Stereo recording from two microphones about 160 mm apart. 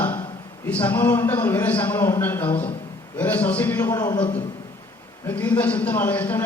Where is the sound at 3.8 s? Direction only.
25° left (ahead or behind).